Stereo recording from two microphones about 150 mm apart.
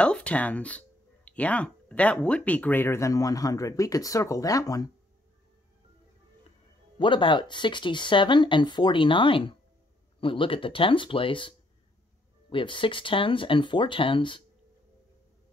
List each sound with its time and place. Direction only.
0.0 s speech: 10° left (ahead or behind); by 4.9 s 25° left (ahead or behind)
7.0 s speech: 35° left (ahead or behind)